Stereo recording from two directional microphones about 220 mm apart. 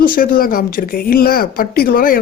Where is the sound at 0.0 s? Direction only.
40° left (ahead or behind).